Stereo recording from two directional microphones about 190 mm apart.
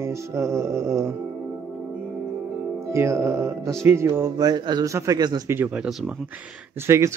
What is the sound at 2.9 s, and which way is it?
A man's voice, 15° right (ahead or behind).